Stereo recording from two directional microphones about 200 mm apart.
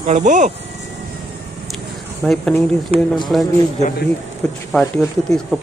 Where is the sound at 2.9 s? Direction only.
30° right (ahead or behind).